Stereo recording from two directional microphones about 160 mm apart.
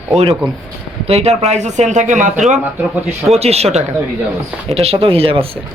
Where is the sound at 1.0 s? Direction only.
40° right (ahead or behind).